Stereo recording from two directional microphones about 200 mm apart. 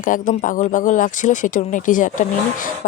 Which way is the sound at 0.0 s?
40° left (ahead or behind).